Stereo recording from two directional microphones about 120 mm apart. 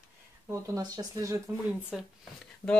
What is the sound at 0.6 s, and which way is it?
Speech, 30° right (ahead or behind).